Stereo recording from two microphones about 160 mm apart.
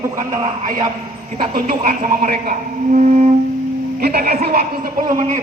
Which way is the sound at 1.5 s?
60° right (ahead or behind).